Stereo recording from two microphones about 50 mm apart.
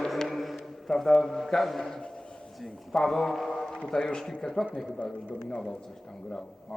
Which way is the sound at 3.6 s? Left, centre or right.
Centre.